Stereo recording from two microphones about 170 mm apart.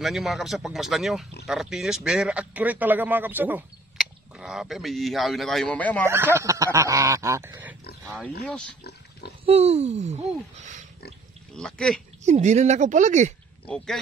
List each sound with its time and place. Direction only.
0.0 s a man's voice: centre (ahead or behind)
6.0 s speech: 15° right (ahead or behind)
9.5 s speech: 40° right (ahead or behind)
11.5 s speech: 5° left (ahead or behind)
12.3 s speech: 45° right (ahead or behind)
13.7 s speech: 5° left (ahead or behind)